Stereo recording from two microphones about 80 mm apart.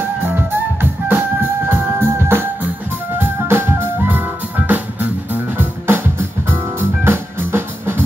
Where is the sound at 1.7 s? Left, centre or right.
Right.